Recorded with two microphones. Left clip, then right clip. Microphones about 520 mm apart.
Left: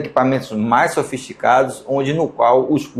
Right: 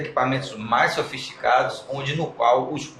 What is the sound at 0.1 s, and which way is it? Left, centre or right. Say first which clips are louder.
Speech: left 7 dB; left.